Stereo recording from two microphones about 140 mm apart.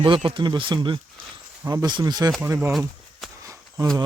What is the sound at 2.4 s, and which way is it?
Speech, 15° right (ahead or behind).